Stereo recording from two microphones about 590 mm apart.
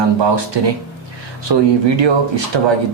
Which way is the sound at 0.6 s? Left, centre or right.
Right.